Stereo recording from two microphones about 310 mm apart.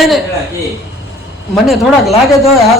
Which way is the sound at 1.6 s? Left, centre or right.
Centre.